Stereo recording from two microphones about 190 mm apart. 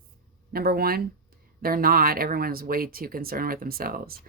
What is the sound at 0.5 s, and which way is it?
Speech, 55° right (ahead or behind).